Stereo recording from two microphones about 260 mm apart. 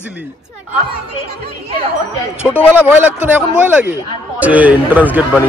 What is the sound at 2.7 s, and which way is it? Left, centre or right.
Speech, centre.